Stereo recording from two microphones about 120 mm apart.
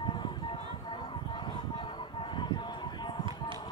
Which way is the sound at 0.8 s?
40° left (ahead or behind).